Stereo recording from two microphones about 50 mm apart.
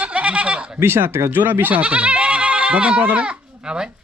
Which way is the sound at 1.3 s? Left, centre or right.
Right.